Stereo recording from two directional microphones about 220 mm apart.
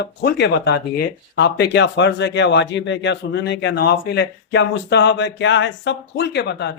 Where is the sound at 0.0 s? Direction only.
50° left (ahead or behind).